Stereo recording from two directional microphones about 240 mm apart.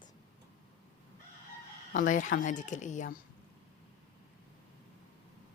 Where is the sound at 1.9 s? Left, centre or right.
Left.